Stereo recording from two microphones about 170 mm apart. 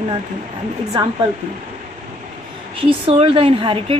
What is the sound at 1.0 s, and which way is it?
Speech, 30° right (ahead or behind).